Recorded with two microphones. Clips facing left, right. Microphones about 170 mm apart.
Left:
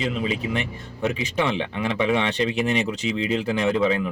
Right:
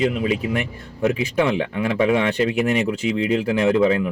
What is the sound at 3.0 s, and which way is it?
Speech, 55° right (ahead or behind).